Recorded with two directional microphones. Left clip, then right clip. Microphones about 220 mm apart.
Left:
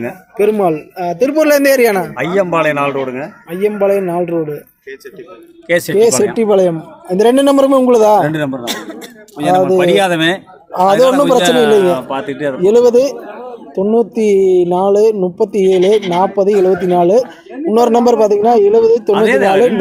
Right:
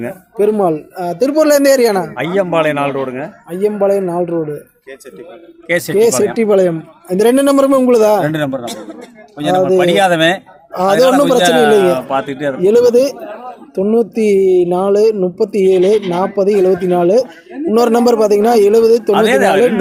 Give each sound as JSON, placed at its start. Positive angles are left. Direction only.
{"t": 0.0, "sound": "a man's voice", "side_deg": -5}
{"t": 5.6, "sound": "a man's voice", "side_deg": 10}
{"t": 8.6, "sound": "speech", "side_deg": 55}
{"t": 9.4, "sound": "a man's voice", "side_deg": -5}